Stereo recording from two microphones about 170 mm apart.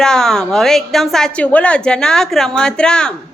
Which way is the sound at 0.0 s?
5° left (ahead or behind).